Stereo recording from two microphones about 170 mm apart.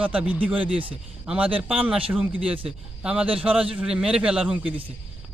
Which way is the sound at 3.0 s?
5° right (ahead or behind).